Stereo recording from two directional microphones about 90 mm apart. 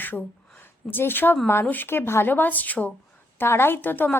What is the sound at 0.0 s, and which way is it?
A woman's voice, 20° left (ahead or behind).